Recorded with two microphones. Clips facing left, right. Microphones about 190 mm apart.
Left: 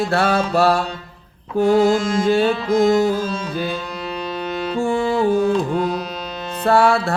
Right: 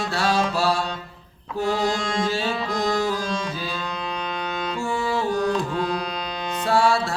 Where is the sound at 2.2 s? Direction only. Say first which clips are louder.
Left 11 dB; 55° left (ahead or behind).